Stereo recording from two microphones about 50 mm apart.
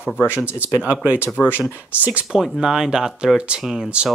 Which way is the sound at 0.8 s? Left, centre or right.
Right.